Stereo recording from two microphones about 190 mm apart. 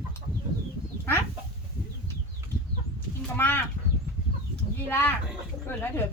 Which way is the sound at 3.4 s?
10° left (ahead or behind).